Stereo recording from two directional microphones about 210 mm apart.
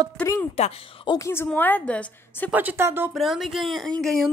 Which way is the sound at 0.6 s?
25° left (ahead or behind).